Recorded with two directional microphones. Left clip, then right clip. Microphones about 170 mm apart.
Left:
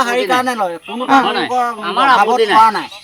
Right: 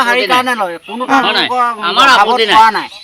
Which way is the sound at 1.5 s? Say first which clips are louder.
Right 3 dB; 15° left (ahead or behind).